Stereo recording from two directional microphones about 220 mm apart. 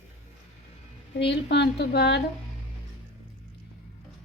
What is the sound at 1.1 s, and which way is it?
A woman's voice, 50° left (ahead or behind).